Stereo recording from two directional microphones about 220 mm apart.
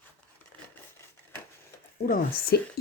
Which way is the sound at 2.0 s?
40° left (ahead or behind).